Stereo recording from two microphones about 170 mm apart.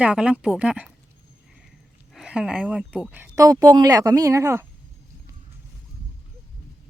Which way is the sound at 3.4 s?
20° right (ahead or behind).